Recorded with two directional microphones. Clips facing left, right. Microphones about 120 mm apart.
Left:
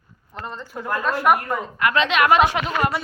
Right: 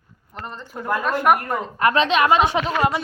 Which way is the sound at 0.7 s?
15° right (ahead or behind).